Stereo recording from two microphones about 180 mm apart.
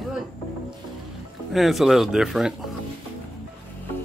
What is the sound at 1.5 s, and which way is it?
Speech, centre (ahead or behind).